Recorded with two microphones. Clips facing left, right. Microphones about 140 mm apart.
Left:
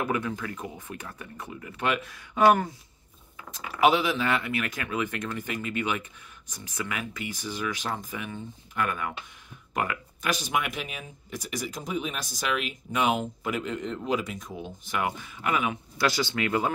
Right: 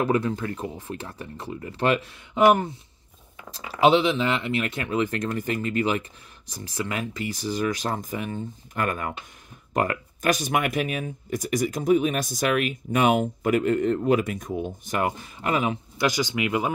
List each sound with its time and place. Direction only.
0.0 s speech: 35° right (ahead or behind)
16.0 s speech: 15° right (ahead or behind)